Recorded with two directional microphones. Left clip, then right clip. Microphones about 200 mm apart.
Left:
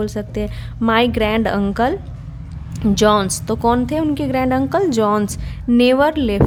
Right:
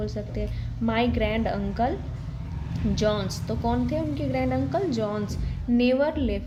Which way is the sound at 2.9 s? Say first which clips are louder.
Left 12 dB; 40° left (ahead or behind).